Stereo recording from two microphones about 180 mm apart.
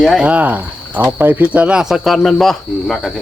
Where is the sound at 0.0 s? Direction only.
Centre (ahead or behind).